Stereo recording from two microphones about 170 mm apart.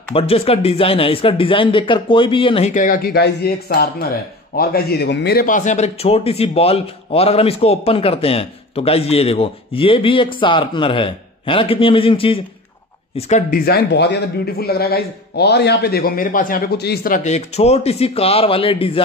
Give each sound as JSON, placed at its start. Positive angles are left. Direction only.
{"t": 0.1, "sound": "a man's voice", "side_deg": 35}
{"t": 2.7, "sound": "a man's voice", "side_deg": 55}
{"t": 13.5, "sound": "a man's voice", "side_deg": 70}